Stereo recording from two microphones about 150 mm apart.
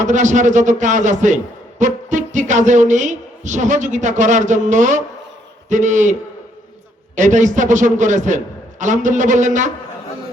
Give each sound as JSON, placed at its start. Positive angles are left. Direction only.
{"t": 0.0, "sound": "music", "side_deg": -55}
{"t": 7.2, "sound": "music", "side_deg": -55}